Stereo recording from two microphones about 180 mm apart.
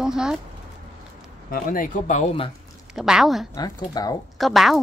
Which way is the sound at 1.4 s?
50° left (ahead or behind).